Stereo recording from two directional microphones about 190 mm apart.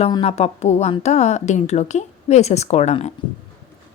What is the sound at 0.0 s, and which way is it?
Speech, 30° left (ahead or behind).